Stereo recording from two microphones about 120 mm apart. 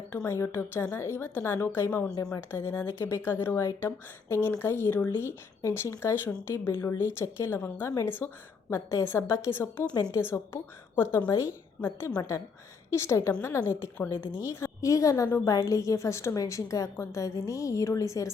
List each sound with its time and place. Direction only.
0.1 s a woman's voice: 20° left (ahead or behind)
9.9 s a woman's voice: 35° left (ahead or behind)
10.2 s a woman's voice: 20° left (ahead or behind)